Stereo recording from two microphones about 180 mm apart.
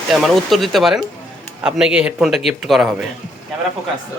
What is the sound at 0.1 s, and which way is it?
Speech, centre (ahead or behind).